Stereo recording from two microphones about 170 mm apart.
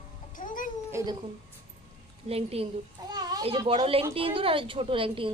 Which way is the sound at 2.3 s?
35° right (ahead or behind).